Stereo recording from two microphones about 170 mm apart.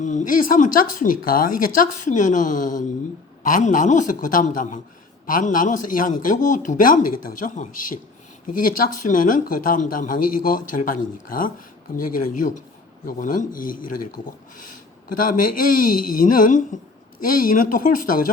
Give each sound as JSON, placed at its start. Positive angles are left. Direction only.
{"t": 0.0, "sound": "speech", "side_deg": 45}